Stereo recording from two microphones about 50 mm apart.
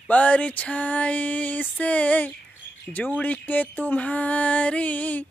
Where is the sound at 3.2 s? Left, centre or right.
Left.